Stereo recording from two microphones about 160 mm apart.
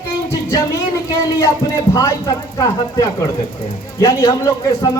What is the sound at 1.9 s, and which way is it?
A man's voice, 20° left (ahead or behind).